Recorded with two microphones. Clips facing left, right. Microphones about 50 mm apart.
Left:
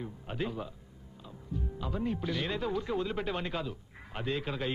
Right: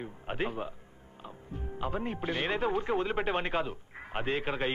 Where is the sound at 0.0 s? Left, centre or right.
Right.